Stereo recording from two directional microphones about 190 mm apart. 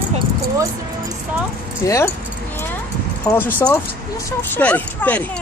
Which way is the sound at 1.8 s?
15° left (ahead or behind).